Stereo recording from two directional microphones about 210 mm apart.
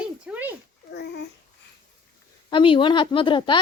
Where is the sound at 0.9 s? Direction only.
55° left (ahead or behind).